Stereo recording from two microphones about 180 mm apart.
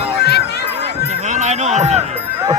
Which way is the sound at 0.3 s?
65° left (ahead or behind).